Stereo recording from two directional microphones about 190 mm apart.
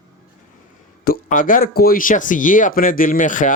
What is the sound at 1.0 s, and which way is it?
Speech, 45° left (ahead or behind).